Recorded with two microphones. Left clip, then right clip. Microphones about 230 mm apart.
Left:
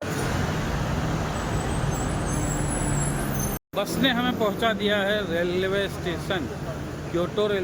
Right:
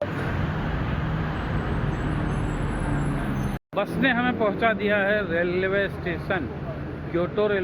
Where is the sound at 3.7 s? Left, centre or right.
Centre.